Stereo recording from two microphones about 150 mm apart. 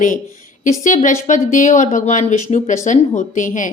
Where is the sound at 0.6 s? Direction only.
60° left (ahead or behind).